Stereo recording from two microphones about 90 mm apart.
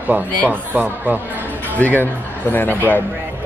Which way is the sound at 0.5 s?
20° right (ahead or behind).